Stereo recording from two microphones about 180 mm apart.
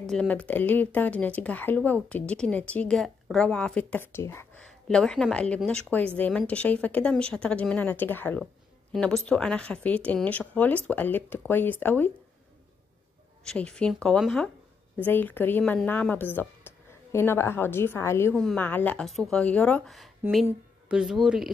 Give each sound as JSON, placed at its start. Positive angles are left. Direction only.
{"t": 0.1, "sound": "speech", "side_deg": 5}
{"t": 13.4, "sound": "speech", "side_deg": 5}
{"t": 18.3, "sound": "speech", "side_deg": 5}